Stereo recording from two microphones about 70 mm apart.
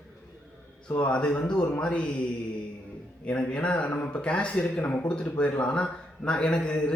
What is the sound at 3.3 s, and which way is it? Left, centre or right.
A man's voice, centre.